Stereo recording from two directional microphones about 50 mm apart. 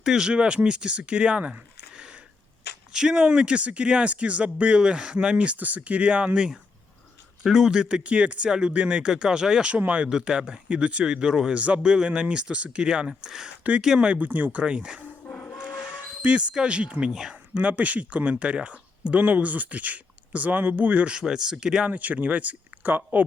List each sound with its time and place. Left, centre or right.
0.0 s speech: centre
1.9 s a sound: centre
2.9 s speech: centre
10.1 s speech: centre
14.2 s speech: right
14.6 s speech: centre
15.3 s music: left
16.2 s speech: right
17.1 s speech: centre
17.3 s speech: right
21.8 s speech: right